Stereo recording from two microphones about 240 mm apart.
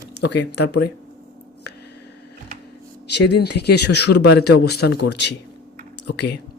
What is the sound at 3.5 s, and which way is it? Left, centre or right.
Speech, left.